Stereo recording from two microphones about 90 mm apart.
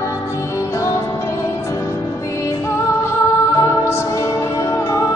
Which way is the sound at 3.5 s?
40° left (ahead or behind).